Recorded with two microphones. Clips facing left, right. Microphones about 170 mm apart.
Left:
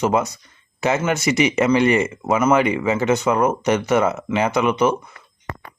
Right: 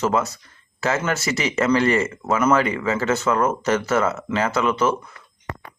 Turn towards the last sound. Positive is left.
turn(degrees=15)  # may be behind; listen again after turning